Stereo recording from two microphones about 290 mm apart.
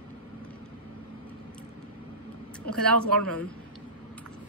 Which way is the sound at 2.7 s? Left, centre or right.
Right.